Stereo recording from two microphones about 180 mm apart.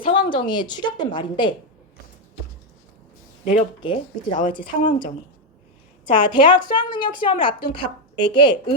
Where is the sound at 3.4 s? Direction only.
45° left (ahead or behind).